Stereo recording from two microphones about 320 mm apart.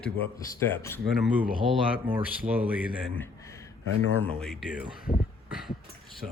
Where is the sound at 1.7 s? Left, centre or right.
Centre.